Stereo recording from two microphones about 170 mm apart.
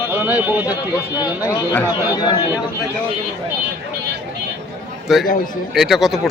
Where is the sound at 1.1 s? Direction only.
20° left (ahead or behind).